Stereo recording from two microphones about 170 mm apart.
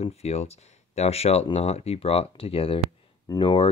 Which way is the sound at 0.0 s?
40° left (ahead or behind).